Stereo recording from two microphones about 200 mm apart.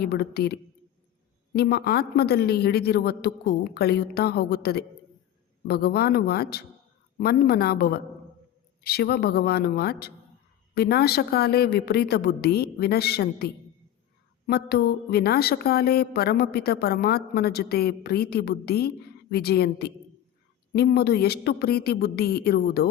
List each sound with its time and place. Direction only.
0.0 s a woman's voice: 50° left (ahead or behind)
1.5 s a woman's voice: 55° left (ahead or behind)